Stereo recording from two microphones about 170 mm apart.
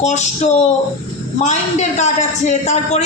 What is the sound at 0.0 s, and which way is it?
A man's voice, 40° left (ahead or behind).